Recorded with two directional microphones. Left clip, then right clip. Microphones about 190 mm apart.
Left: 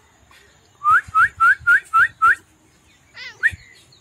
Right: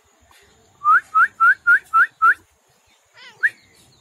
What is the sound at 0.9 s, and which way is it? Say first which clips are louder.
Whistling: even; 10° left (ahead or behind).